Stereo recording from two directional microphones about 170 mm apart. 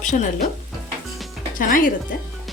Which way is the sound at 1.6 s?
55° left (ahead or behind).